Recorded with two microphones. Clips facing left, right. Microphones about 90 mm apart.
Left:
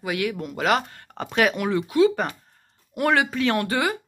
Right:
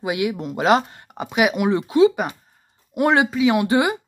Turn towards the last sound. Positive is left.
turn(degrees=-20)  # may be behind; listen again after turning